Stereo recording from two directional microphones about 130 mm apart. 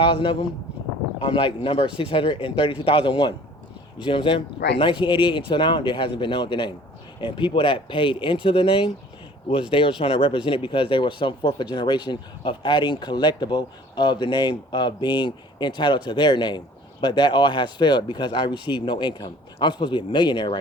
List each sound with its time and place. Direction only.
0.0 s speech: 40° left (ahead or behind)